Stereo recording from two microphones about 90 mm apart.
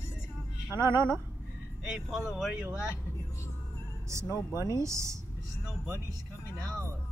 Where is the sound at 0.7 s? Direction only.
30° right (ahead or behind).